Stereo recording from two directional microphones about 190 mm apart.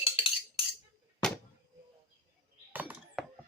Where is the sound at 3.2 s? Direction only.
Centre (ahead or behind).